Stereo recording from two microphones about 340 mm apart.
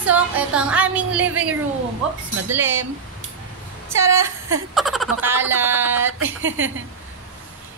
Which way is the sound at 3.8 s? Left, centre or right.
Centre.